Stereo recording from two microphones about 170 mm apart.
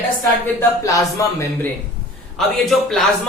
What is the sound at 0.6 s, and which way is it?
Speech, 20° left (ahead or behind).